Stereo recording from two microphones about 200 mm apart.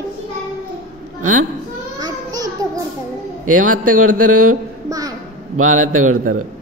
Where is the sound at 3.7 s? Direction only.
90° right.